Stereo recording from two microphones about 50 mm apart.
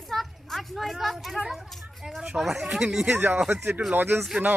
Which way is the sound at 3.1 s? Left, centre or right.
Right.